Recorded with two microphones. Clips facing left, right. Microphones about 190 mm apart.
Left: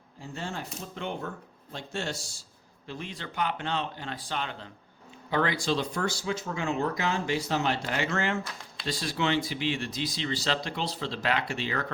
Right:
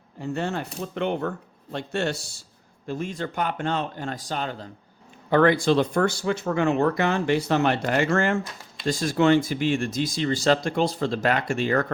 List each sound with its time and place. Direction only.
0.2 s speech: 65° right (ahead or behind)
2.8 s speech: 45° right (ahead or behind)
5.3 s speech: 55° right (ahead or behind)